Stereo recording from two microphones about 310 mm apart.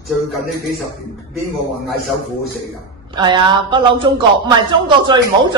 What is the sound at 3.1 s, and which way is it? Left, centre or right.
A woman's voice, centre.